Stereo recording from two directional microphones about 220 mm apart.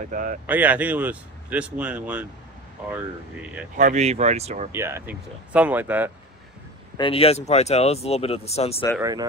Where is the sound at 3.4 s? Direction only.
5° right (ahead or behind).